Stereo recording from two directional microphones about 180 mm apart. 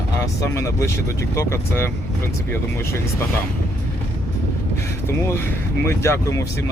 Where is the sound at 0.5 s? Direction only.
15° left (ahead or behind).